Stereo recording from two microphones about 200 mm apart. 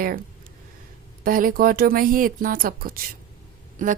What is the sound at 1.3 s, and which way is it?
A woman's voice, 45° right (ahead or behind).